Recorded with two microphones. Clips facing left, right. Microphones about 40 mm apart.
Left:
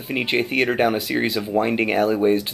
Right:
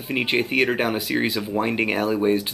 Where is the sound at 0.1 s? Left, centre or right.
Centre.